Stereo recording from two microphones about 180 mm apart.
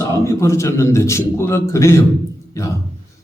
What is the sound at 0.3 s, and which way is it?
A man's voice, 15° left (ahead or behind).